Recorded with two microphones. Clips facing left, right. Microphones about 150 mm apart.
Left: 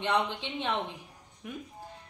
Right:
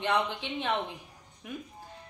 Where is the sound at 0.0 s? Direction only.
20° left (ahead or behind).